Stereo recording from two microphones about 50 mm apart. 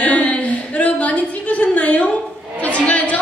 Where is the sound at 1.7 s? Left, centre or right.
Left.